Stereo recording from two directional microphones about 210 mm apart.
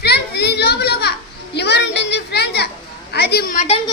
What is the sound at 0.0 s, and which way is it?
Children playing, 50° left (ahead or behind).